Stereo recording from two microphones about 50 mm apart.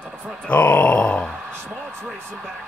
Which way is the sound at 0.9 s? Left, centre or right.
Left.